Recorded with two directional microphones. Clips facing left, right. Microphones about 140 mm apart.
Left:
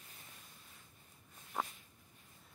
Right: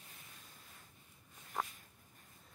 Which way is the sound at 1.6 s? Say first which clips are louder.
Left 1 dB; 5° left (ahead or behind).